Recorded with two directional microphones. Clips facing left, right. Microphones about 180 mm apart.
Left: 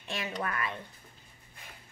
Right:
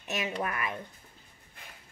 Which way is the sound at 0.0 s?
20° right (ahead or behind).